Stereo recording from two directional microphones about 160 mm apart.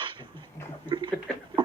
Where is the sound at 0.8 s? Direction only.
30° right (ahead or behind).